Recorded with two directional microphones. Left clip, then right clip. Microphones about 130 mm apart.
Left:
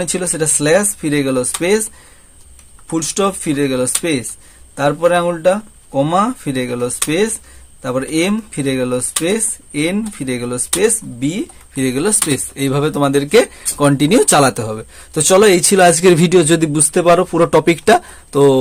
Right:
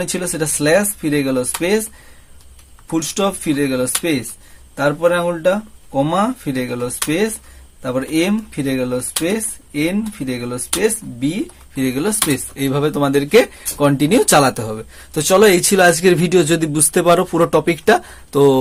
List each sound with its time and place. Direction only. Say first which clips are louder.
0.0 s speech: left 3 dB; 25° left (ahead or behind)
2.9 s speech: left 2 dB; 25° left (ahead or behind)
16.3 s speech: left 3 dB; 25° left (ahead or behind)
16.8 s speech: left 1 dB; 15° left (ahead or behind)
17.5 s speech: left 4 dB; 30° left (ahead or behind)